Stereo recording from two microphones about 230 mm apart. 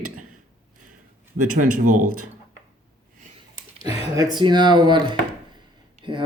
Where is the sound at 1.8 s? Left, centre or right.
Right.